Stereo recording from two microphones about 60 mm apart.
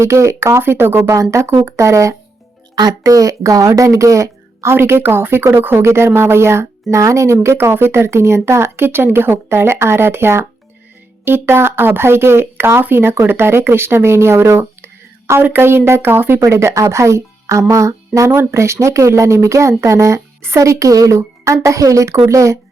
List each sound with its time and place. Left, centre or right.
0.0 s speech: right
0.6 s speech: right
1.1 s speech: right
3.0 s speech: right
4.7 s speech: right
6.9 s speech: right
7.4 s speech: right
15.4 s speech: right
16.4 s speech: right
18.3 s speech: right
20.7 s speech: right
21.2 s speech: right